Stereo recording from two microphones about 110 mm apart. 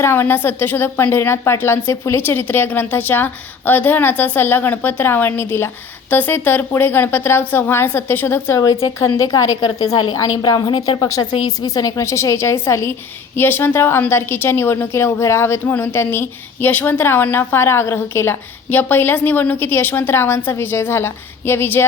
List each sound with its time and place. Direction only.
0.0 s a woman's voice: 20° left (ahead or behind)